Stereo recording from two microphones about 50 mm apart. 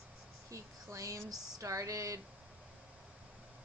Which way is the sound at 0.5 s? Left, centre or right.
Right.